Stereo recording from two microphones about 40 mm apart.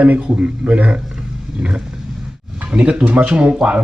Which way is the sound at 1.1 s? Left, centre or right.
Right.